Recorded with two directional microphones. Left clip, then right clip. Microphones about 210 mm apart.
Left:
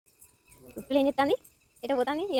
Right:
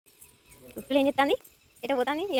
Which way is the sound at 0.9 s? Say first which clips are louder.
Right 1 dB; 5° left (ahead or behind).